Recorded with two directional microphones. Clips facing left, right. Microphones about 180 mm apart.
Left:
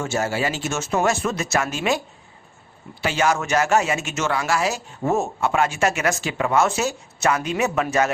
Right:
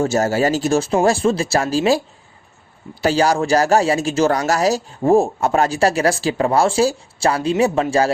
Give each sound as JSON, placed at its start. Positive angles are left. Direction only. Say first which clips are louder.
{"t": 0.0, "sound": "speech", "louder": "right 7 dB", "side_deg": -40}
{"t": 3.0, "sound": "speech", "louder": "right 5 dB", "side_deg": -35}